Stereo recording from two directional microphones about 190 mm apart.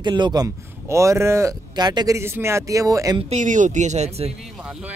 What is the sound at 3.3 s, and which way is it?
Speech, 40° right (ahead or behind).